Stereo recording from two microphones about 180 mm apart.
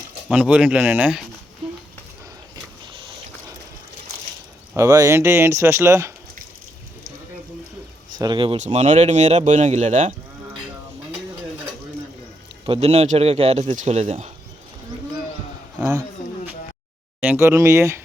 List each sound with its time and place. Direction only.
0.3 s speech: 5° right (ahead or behind)
4.7 s speech: 20° right (ahead or behind)
8.2 s speech: 25° right (ahead or behind)
8.5 s speech: 40° right (ahead or behind)
12.6 s speech: 30° right (ahead or behind)
17.2 s speech: 10° right (ahead or behind)